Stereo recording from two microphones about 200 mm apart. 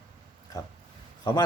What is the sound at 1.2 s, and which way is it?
Speech, 20° left (ahead or behind).